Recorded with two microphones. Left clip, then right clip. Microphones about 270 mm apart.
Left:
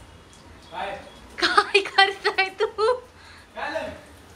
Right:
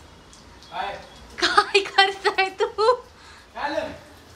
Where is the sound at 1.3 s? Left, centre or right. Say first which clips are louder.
Even; centre.